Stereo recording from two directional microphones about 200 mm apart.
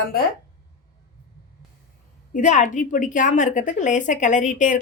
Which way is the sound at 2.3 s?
35° left (ahead or behind).